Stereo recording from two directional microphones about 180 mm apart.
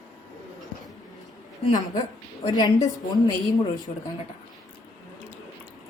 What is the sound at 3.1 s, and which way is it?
Speech, 20° left (ahead or behind).